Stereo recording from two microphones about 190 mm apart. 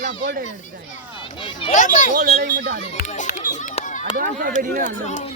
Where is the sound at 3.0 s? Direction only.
40° left (ahead or behind).